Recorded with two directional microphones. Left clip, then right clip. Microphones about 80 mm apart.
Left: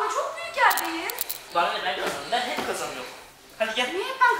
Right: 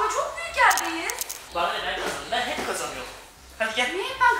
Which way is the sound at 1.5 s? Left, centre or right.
Left.